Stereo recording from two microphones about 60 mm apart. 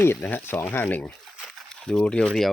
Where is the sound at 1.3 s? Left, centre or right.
Centre.